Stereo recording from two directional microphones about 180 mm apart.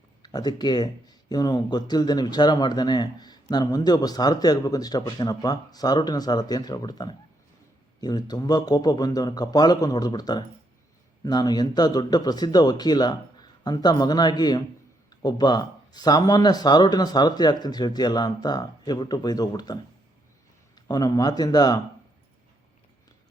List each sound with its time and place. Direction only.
0.2 s speech: 20° left (ahead or behind)